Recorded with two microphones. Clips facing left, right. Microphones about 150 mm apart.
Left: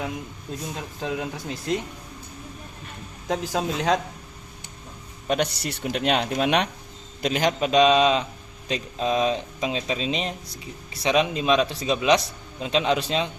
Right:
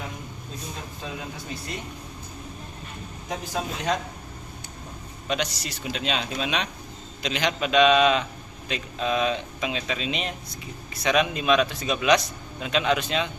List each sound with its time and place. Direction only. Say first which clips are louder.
1.0 s speech: left 8 dB; 80° left
3.2 s speech: left 5 dB; 90° left
5.3 s speech: left 4 dB; 55° left (ahead or behind)
7.2 s a man's voice: left 4 dB; 45° left (ahead or behind)